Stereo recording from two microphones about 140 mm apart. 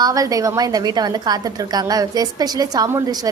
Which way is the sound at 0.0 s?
25° right (ahead or behind).